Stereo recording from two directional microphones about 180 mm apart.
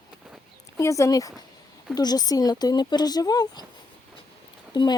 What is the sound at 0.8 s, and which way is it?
Speech, 15° left (ahead or behind).